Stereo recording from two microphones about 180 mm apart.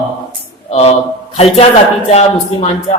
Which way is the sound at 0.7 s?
35° left (ahead or behind).